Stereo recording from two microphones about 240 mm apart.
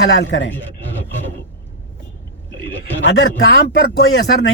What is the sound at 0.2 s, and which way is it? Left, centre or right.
Speech, left.